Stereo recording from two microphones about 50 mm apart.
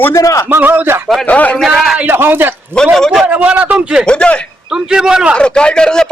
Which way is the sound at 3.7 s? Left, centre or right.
Centre.